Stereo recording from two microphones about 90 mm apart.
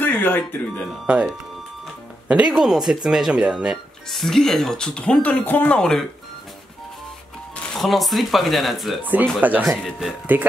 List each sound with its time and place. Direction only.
0.0 s speech: 20° left (ahead or behind)
1.0 s speech: 10° right (ahead or behind)
4.1 s speech: 5° left (ahead or behind)
7.5 s speech: 5° left (ahead or behind)
9.0 s speech: 20° right (ahead or behind)
9.6 s speech: centre (ahead or behind)